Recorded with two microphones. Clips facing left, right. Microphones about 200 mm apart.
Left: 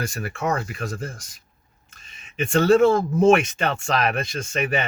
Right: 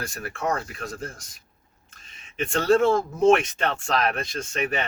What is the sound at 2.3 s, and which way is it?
Speech, 5° left (ahead or behind).